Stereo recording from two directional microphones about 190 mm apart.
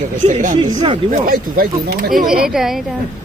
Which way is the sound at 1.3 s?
50° right (ahead or behind).